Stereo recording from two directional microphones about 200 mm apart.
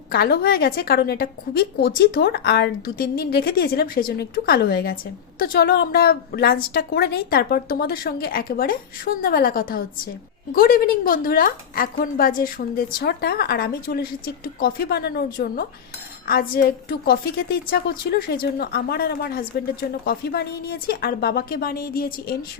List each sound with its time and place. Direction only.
0.1 s a woman's voice: 50° left (ahead or behind)